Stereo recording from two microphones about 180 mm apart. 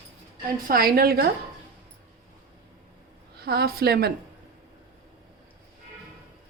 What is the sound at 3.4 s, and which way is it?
Speech, 60° right (ahead or behind).